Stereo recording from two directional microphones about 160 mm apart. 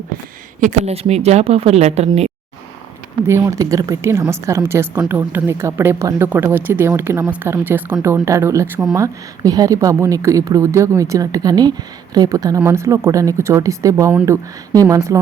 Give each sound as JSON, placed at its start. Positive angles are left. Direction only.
{"t": 0.6, "sound": "speech", "side_deg": -45}
{"t": 3.2, "sound": "a woman's voice", "side_deg": -15}